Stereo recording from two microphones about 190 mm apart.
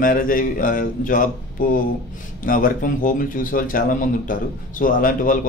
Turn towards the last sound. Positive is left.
turn(degrees=45)  # may be behind; listen again after turning